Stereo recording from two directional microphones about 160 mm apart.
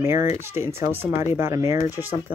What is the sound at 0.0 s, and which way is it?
Speech, 15° right (ahead or behind).